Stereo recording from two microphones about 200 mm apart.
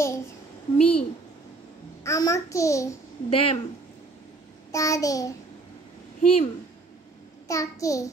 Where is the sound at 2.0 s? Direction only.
15° left (ahead or behind).